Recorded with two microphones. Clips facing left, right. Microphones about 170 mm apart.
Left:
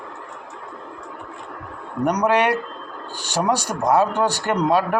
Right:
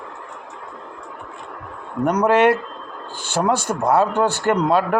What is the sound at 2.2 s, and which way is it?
Speech, 15° left (ahead or behind).